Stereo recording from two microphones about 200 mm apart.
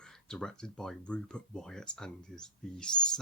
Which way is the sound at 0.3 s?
5° left (ahead or behind).